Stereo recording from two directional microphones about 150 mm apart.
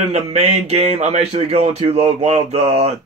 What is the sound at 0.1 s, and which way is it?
Speech, 45° right (ahead or behind).